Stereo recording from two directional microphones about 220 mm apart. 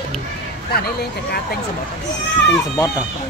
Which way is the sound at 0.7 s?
45° left (ahead or behind).